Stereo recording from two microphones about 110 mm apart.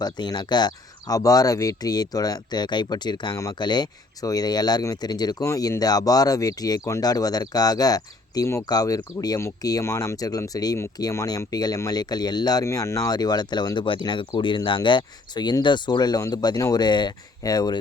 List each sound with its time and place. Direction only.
0.0 s speech: 40° left (ahead or behind)
12.6 s speech: 25° left (ahead or behind)